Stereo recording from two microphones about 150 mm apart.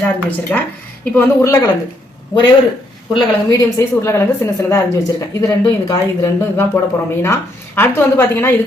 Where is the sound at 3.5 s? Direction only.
20° left (ahead or behind).